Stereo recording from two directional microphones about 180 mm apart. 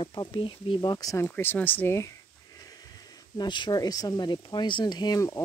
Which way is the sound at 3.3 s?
25° left (ahead or behind).